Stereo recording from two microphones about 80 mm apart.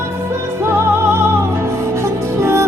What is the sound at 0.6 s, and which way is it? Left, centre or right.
Music, right.